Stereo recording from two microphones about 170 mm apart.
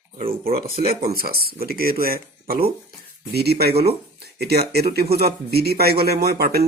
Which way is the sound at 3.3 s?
70° right (ahead or behind).